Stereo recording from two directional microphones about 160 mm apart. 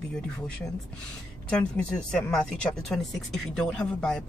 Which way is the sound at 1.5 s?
5° left (ahead or behind).